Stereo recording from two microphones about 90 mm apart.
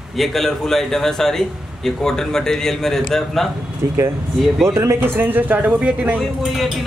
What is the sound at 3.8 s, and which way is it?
A man's voice, 35° right (ahead or behind).